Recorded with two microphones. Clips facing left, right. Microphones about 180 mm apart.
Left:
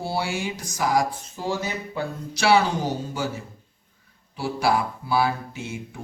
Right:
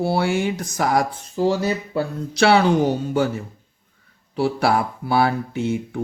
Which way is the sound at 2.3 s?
60° right (ahead or behind).